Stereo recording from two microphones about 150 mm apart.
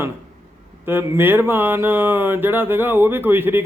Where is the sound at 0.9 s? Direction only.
15° right (ahead or behind).